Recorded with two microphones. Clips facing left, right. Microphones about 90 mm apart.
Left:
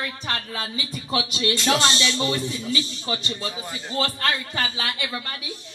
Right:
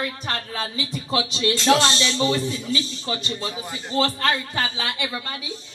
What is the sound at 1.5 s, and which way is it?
Speech, 25° right (ahead or behind).